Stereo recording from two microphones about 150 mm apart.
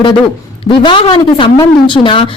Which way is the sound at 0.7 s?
35° left (ahead or behind).